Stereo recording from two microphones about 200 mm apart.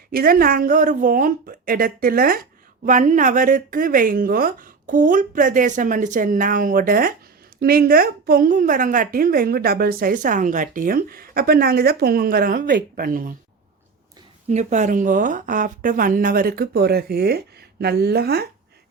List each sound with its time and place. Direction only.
0.1 s a woman's voice: 45° right (ahead or behind)
14.5 s a woman's voice: 35° right (ahead or behind)